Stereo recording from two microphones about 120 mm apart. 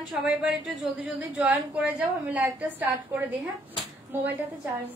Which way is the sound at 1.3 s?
10° right (ahead or behind).